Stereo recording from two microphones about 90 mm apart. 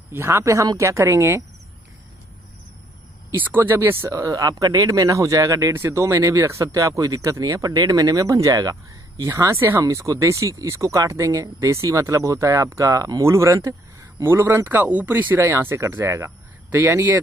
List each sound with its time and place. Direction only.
0.1 s speech: 30° right (ahead or behind)
3.3 s speech: 25° right (ahead or behind)
4.1 s speech: 40° right (ahead or behind); by 17.2 s 25° right (ahead or behind)